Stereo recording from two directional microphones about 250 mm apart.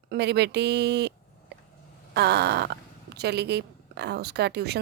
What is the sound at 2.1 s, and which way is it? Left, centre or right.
Speech, right.